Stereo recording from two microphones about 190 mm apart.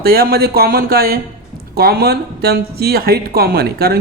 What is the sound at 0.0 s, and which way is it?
Speech, 55° right (ahead or behind).